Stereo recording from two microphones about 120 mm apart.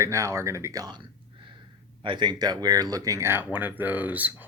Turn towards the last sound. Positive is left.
turn(degrees=-15)  # may be behind; listen again after turning